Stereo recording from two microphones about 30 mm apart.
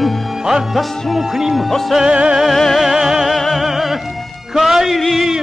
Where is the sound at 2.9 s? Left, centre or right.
Centre.